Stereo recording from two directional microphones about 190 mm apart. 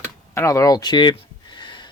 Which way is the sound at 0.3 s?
15° left (ahead or behind).